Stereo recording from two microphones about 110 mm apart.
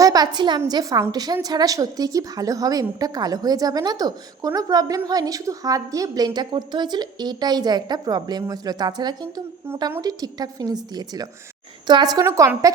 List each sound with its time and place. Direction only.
0.0 s a woman's voice: 35° right (ahead or behind)
12.2 s a woman's voice: 25° right (ahead or behind)